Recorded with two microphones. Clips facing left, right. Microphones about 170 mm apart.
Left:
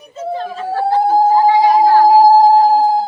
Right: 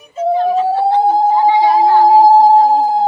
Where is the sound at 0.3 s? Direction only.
20° right (ahead or behind).